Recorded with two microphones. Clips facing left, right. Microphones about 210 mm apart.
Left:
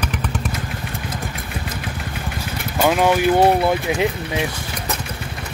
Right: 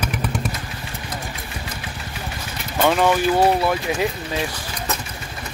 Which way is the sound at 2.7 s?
10° left (ahead or behind).